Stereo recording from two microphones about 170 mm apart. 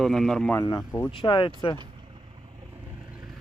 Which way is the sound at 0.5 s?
20° left (ahead or behind).